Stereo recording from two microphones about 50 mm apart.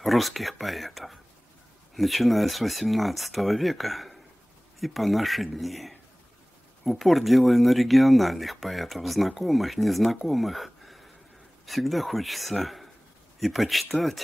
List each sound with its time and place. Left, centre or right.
0.0 s speech: centre
10.2 s a sound: centre
11.6 s speech: centre